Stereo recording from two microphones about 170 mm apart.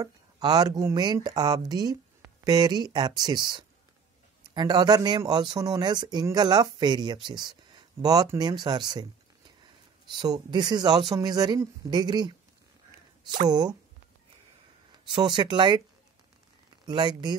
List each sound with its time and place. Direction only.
0.0 s speech: 25° right (ahead or behind)
10.1 s speech: 25° right (ahead or behind)
13.5 s speech: 25° right (ahead or behind)
15.0 s speech: 30° right (ahead or behind)
16.8 s speech: 25° right (ahead or behind)